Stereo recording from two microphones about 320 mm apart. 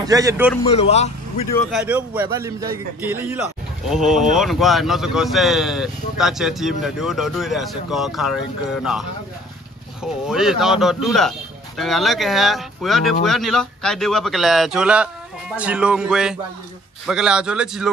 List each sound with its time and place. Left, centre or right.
0.0 s a man's voice: centre
0.7 s a man's voice: centre
1.5 s a man's voice: centre
10.0 s speech: centre